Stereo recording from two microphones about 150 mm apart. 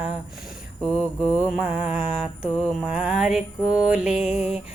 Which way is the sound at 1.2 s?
10° right (ahead or behind).